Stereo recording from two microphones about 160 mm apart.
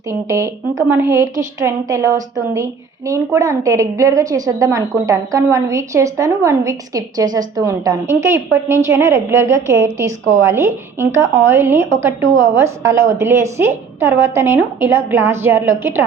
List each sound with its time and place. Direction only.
0.1 s a woman's voice: 20° right (ahead or behind)